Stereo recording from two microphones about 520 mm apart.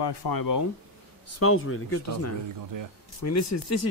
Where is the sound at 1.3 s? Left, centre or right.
Left.